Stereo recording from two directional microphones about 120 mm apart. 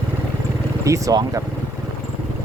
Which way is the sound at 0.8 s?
25° right (ahead or behind).